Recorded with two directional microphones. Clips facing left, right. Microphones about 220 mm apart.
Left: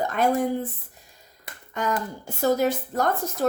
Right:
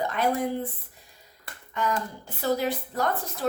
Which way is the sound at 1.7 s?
45° left (ahead or behind).